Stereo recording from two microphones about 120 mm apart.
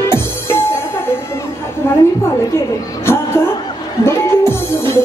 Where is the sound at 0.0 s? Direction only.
20° left (ahead or behind).